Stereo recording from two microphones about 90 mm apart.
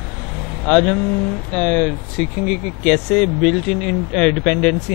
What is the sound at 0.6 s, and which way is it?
Speech, 5° left (ahead or behind).